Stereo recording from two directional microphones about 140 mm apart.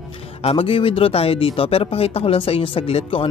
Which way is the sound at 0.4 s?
45° left (ahead or behind).